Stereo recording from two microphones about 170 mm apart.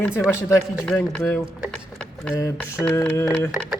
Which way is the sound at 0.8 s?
10° left (ahead or behind).